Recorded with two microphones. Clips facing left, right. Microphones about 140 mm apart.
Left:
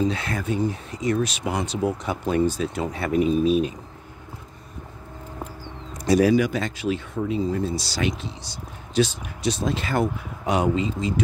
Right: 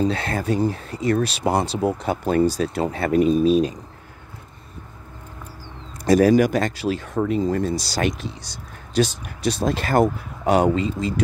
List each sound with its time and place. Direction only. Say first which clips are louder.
0.1 s speech: right 4 dB; 35° right (ahead or behind)
3.1 s speech: right 3 dB; 10° left (ahead or behind)
3.4 s speech: right 3 dB; 35° right (ahead or behind)
6.0 s speech: right 3 dB; 45° right (ahead or behind)
7.2 s speech: right 6 dB; 55° right (ahead or behind)